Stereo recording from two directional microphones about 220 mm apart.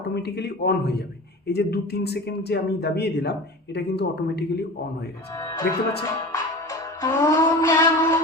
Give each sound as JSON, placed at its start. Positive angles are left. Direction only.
{"t": 0.1, "sound": "speech", "side_deg": 50}
{"t": 5.3, "sound": "speech", "side_deg": 15}
{"t": 6.0, "sound": "music", "side_deg": 15}